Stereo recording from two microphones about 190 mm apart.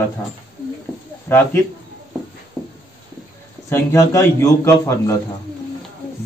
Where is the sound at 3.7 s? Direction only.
15° left (ahead or behind).